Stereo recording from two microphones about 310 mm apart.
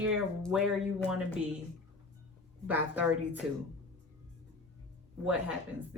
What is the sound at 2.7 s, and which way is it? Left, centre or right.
Speech, centre.